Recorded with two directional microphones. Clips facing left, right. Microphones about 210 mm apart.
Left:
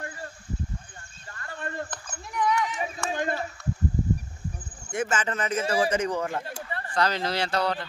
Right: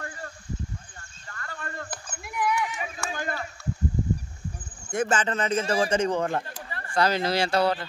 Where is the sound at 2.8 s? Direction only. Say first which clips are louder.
Left 4 dB; 25° left (ahead or behind).